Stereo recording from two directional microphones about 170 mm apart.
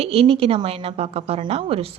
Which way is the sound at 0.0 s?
35° right (ahead or behind).